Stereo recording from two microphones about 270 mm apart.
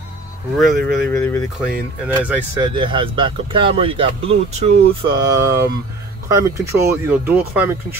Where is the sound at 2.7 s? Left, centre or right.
Centre.